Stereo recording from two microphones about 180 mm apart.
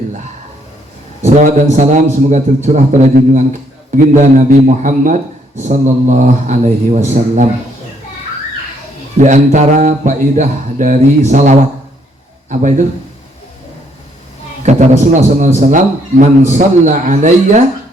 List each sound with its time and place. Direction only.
1.2 s a man's voice: 40° right (ahead or behind)
9.1 s speech: 45° right (ahead or behind)
14.6 s a sound: 40° right (ahead or behind)
15.4 s speech: 40° right (ahead or behind)